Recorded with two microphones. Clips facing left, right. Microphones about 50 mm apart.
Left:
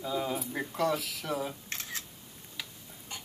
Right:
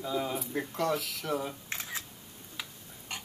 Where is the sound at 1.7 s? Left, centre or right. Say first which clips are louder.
Right 1 dB; centre.